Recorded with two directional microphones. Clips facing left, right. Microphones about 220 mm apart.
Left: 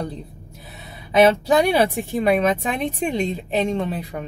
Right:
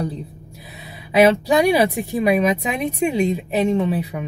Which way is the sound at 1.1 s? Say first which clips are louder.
Right 1 dB; 10° right (ahead or behind).